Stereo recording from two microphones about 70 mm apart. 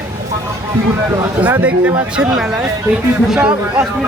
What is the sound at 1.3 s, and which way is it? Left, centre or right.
A man's voice, right.